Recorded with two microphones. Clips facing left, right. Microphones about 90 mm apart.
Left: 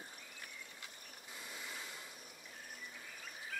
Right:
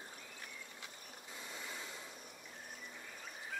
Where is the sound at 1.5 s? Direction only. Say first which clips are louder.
Right 1 dB; 5° left (ahead or behind).